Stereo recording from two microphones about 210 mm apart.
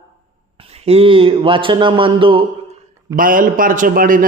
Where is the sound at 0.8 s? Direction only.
25° right (ahead or behind).